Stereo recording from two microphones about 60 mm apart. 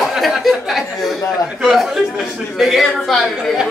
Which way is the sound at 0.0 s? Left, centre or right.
Centre.